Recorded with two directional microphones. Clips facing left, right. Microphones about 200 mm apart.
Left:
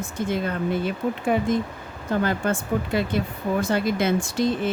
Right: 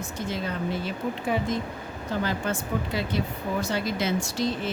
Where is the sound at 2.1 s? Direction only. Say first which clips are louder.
Left 5 dB; 55° left (ahead or behind).